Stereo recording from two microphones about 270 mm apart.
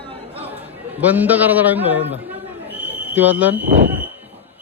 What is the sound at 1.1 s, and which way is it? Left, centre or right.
Speech, centre.